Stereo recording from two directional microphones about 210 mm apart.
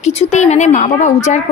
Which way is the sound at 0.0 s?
35° left (ahead or behind).